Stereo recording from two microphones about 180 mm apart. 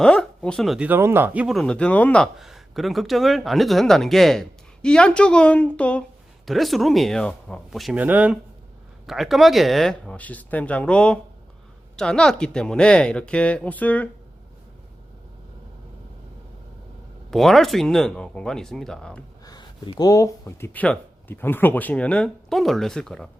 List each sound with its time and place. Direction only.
0.0 s speech: 5° left (ahead or behind)
17.3 s speech: centre (ahead or behind)
19.5 s speech: 20° left (ahead or behind); by 23.3 s 5° left (ahead or behind)